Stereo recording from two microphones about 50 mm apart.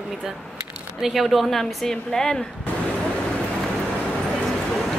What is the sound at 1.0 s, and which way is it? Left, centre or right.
Speech, centre.